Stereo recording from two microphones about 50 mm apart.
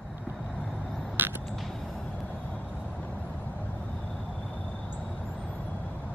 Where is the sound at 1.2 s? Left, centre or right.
Right.